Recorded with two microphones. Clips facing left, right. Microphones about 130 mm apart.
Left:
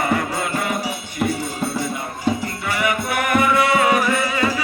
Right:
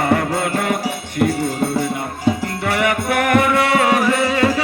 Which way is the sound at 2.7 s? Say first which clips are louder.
Right 3 dB; 70° right (ahead or behind).